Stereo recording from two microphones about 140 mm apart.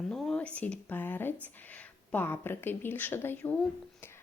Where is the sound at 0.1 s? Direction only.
5° left (ahead or behind).